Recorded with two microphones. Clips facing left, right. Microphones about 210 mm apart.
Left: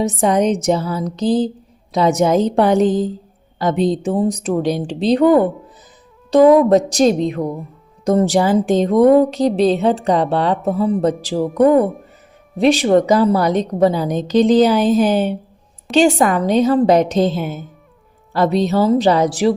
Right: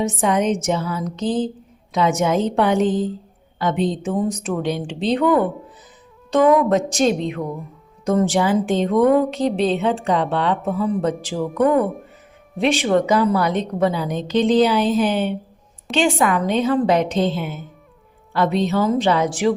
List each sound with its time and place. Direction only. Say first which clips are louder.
0.0 s speech: left 4 dB; 35° left (ahead or behind)